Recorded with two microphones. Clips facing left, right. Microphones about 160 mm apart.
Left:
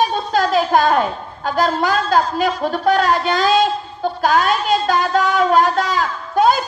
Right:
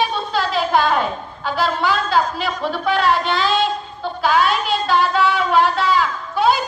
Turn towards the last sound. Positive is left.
turn(degrees=45)  # may be behind; listen again after turning